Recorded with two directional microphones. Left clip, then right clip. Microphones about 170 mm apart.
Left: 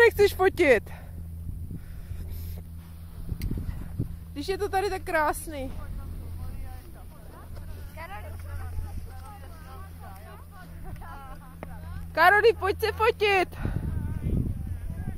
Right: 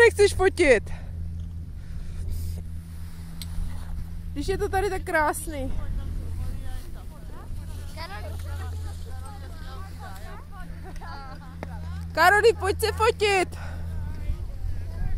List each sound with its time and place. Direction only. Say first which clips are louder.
0.0 s speech: right 2 dB; 5° left (ahead or behind)
4.4 s a woman's voice: right 1 dB; 5° left (ahead or behind)
8.0 s vehicle: right 2 dB; 30° right (ahead or behind)
11.1 s music: right 3 dB; centre (ahead or behind)